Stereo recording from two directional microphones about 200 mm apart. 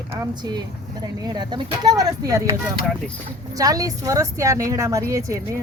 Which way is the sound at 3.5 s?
15° right (ahead or behind).